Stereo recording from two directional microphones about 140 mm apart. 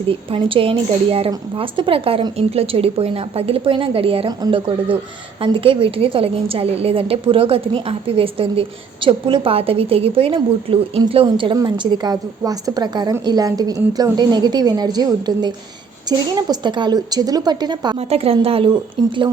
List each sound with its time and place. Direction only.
0.1 s a woman's voice: 40° right (ahead or behind)
17.9 s a woman's voice: 45° right (ahead or behind)